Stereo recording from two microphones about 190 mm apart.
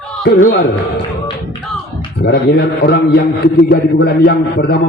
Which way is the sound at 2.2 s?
60° left (ahead or behind).